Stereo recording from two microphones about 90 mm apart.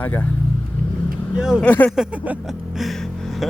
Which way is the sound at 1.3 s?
5° right (ahead or behind).